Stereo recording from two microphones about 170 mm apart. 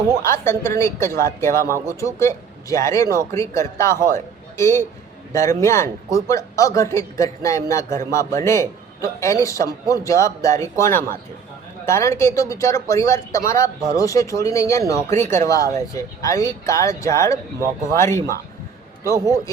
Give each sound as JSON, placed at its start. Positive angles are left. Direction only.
{"t": 0.2, "sound": "speech", "side_deg": 15}